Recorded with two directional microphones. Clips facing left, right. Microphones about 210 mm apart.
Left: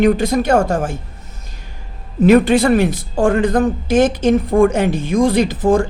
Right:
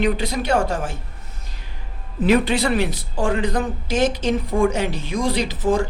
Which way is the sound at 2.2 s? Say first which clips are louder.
Left 7 dB; 50° left (ahead or behind).